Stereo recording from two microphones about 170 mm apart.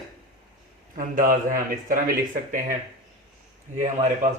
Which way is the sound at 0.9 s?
55° right (ahead or behind).